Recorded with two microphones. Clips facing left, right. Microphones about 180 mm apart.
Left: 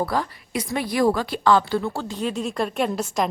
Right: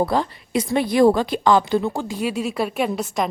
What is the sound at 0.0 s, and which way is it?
A woman's voice, 25° right (ahead or behind).